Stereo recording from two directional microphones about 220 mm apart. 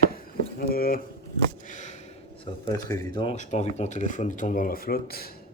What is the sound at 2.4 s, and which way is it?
Speech, 15° left (ahead or behind).